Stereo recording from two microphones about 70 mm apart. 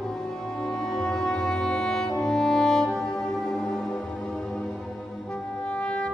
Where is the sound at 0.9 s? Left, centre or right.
Centre.